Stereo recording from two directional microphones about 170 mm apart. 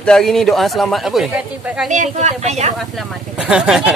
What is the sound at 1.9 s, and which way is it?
Speech, 45° right (ahead or behind).